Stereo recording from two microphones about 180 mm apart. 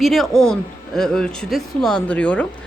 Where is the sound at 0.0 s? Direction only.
Centre (ahead or behind).